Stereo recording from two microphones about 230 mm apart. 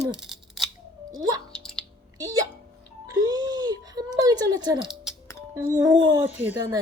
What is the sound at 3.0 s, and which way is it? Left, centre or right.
Speech, centre.